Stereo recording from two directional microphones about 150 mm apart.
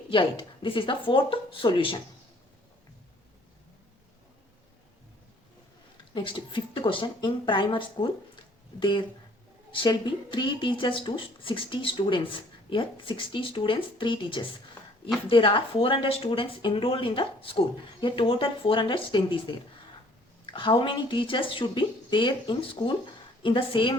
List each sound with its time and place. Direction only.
0.1 s speech: 35° left (ahead or behind)
6.1 s speech: 35° left (ahead or behind)